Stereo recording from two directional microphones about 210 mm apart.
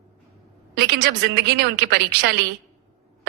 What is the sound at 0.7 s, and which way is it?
A woman's voice, 50° right (ahead or behind).